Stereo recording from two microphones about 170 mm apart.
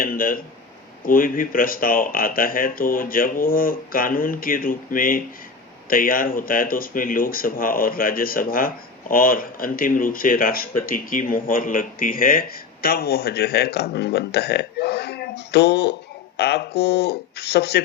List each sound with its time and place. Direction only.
0.0 s speech: 55° left (ahead or behind); by 17.8 s 75° left (ahead or behind)